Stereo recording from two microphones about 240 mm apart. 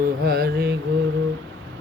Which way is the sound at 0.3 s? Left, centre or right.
Right.